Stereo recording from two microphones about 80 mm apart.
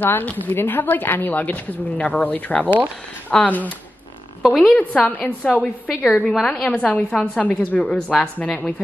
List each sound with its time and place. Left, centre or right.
0.0 s speech: left
2.6 s speech: right
3.3 s speech: centre
4.4 s a woman's voice: centre
4.6 s a woman's voice: centre